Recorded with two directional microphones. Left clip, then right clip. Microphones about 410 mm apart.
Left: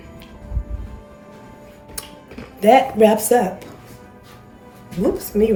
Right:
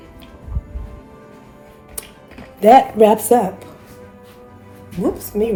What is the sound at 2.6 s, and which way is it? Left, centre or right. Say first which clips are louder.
Speech: right 3 dB; centre.